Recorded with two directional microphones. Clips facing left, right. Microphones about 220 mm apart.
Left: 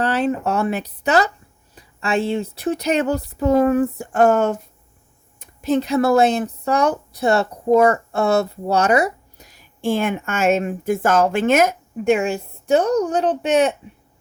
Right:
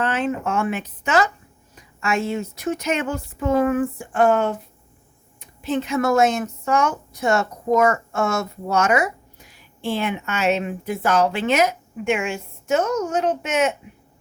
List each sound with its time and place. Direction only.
0.0 s speech: 35° left (ahead or behind)